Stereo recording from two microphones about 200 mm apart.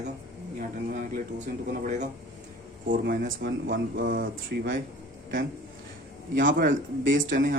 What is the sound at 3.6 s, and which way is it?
Speech, 60° right (ahead or behind).